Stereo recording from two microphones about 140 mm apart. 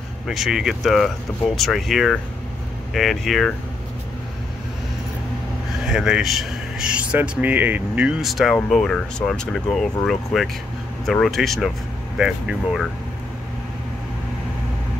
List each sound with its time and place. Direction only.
0.3 s speech: centre (ahead or behind)
5.9 s speech: 5° right (ahead or behind)